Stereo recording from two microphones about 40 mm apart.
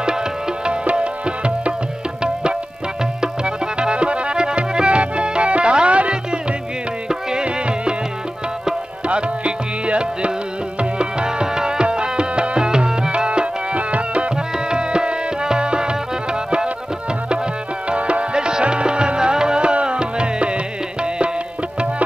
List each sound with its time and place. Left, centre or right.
0.0 s music: centre
0.8 s tabla: right
3.2 s music: right
7.1 s music: centre
7.4 s music: right
9.0 s music: right
14.3 s tabla: right
17.8 s music: right